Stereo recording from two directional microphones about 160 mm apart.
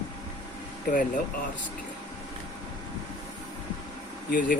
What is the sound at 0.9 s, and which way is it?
Speech, 55° left (ahead or behind).